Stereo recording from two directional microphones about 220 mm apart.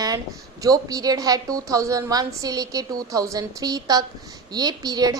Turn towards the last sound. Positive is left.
turn(degrees=-15)  # may be behind; listen again after turning